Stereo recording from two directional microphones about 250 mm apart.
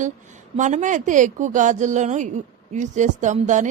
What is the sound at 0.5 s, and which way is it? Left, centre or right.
A woman's voice, right.